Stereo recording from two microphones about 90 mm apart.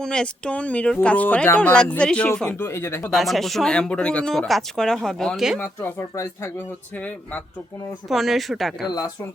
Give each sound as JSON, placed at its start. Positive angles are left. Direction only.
{"t": 0.0, "sound": "speech", "side_deg": 10}
{"t": 2.5, "sound": "speech", "side_deg": 30}
{"t": 3.1, "sound": "speech", "side_deg": 0}
{"t": 5.5, "sound": "speech", "side_deg": 20}
{"t": 6.0, "sound": "speech", "side_deg": 35}
{"t": 8.1, "sound": "speech", "side_deg": 0}